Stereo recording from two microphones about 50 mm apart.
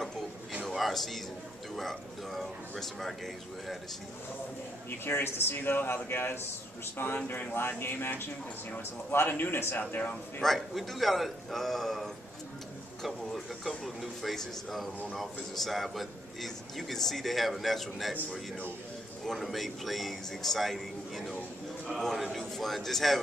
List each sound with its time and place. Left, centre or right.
0.7 s a sound: centre
1.8 s a man's voice: centre
5.0 s a man's voice: left
9.1 s a man's voice: left
10.4 s a man's voice: centre
19.2 s a man's voice: centre